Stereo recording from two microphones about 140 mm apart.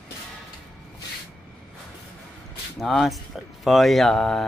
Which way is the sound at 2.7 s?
Centre (ahead or behind).